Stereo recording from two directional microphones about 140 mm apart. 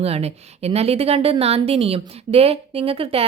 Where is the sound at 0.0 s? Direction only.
45° right (ahead or behind).